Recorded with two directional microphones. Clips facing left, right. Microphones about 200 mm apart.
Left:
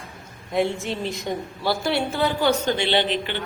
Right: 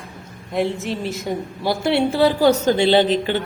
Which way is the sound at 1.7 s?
25° right (ahead or behind).